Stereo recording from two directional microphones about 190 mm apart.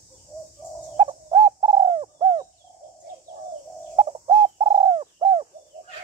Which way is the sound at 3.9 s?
25° right (ahead or behind).